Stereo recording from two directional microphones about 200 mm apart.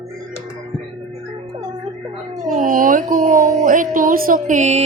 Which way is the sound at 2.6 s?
40° right (ahead or behind).